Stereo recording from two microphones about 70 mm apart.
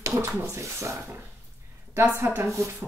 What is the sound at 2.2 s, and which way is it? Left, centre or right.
Speech, right.